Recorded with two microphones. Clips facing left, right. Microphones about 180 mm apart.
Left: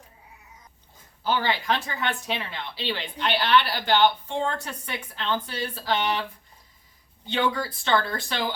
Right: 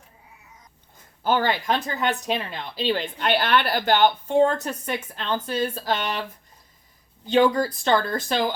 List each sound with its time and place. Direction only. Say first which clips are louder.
1.2 s speech: right 3 dB; 50° right (ahead or behind)
7.3 s speech: right 7 dB; 40° right (ahead or behind)